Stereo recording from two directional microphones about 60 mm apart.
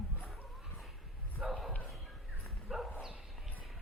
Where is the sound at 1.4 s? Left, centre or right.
Centre.